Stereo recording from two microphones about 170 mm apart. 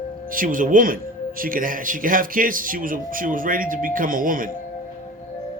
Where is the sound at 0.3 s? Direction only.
55° right (ahead or behind).